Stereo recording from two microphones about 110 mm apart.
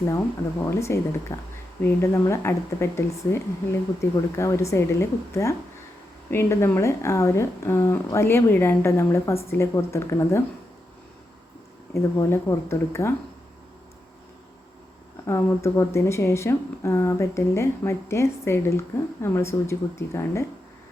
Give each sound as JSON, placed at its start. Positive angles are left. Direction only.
{"t": 0.6, "sound": "a woman's voice", "side_deg": 25}
{"t": 12.1, "sound": "a woman's voice", "side_deg": 25}
{"t": 15.3, "sound": "a woman's voice", "side_deg": 25}